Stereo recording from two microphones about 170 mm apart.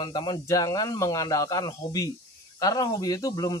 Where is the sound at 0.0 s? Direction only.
25° left (ahead or behind).